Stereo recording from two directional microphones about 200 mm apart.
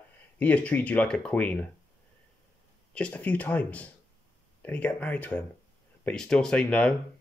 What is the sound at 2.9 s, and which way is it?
Speech, 5° left (ahead or behind).